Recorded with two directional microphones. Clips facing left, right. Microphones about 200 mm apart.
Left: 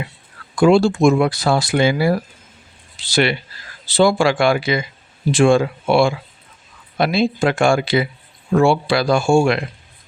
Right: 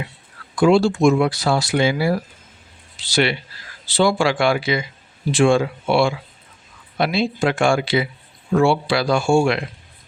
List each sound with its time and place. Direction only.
0.5 s speech: 50° left (ahead or behind)